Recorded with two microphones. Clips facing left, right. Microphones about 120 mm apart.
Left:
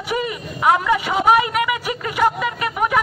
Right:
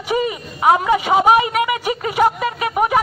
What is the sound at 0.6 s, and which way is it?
Speech, 30° right (ahead or behind).